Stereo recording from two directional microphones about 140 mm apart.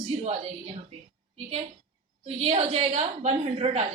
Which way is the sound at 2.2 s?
50° right (ahead or behind).